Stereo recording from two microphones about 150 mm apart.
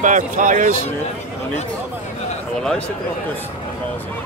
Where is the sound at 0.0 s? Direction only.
60° right (ahead or behind).